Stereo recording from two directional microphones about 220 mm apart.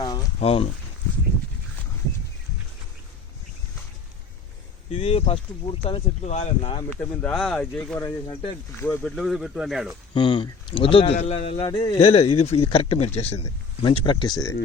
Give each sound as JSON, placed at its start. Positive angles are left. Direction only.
{"t": 0.3, "sound": "speech", "side_deg": 25}
{"t": 4.9, "sound": "speech", "side_deg": 25}
{"t": 6.9, "sound": "speech", "side_deg": 5}
{"t": 10.2, "sound": "speech", "side_deg": 20}